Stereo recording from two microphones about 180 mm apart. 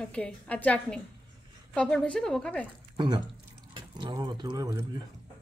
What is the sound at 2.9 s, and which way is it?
Speech, 25° right (ahead or behind).